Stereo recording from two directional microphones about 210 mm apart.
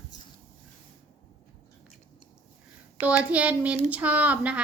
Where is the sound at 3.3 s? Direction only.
5° right (ahead or behind).